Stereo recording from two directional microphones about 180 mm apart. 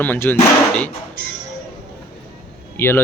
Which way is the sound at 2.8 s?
10° left (ahead or behind).